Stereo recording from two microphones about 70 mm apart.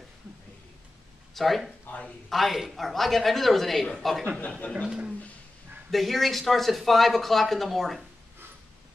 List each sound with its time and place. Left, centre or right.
1.3 s speech: centre
1.9 s speech: centre
2.2 s speech: centre
4.8 s speech: centre
5.9 s speech: centre